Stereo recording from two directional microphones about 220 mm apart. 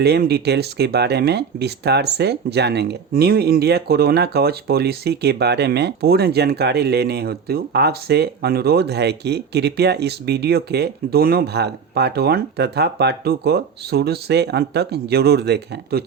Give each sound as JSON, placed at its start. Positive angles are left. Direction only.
{"t": 0.0, "sound": "speech", "side_deg": -45}